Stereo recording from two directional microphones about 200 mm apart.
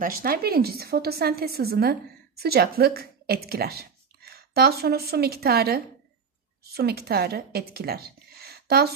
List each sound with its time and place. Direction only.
0.0 s a woman's voice: 45° right (ahead or behind)